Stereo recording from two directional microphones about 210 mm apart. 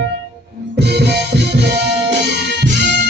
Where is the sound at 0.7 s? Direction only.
50° right (ahead or behind).